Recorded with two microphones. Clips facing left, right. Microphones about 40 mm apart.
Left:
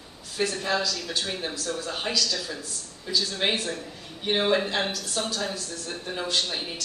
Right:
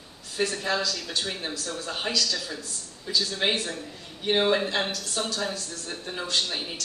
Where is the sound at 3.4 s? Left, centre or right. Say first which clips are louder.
Even; centre.